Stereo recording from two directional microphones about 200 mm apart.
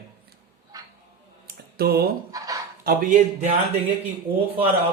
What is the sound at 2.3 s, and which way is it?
Speech, 15° right (ahead or behind).